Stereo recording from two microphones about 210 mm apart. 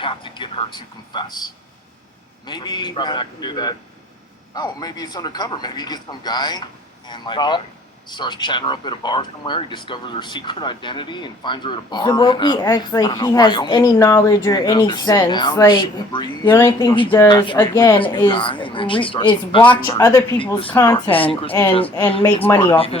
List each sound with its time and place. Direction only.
0.0 s speech: 25° left (ahead or behind)
2.5 s speech: 20° left (ahead or behind)
20.7 s speech: 10° left (ahead or behind)